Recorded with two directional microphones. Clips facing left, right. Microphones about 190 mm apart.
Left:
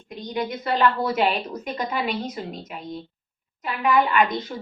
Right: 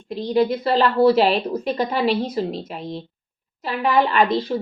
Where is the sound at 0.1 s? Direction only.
30° right (ahead or behind).